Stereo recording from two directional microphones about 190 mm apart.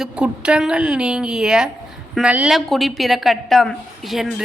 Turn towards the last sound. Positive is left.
turn(degrees=0)  # may be behind; listen again after turning